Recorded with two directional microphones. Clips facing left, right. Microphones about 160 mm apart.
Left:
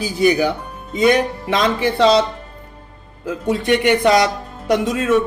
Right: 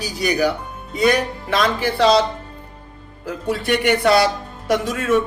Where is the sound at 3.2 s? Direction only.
20° left (ahead or behind).